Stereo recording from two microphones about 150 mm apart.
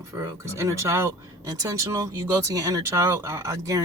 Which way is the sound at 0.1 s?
20° right (ahead or behind).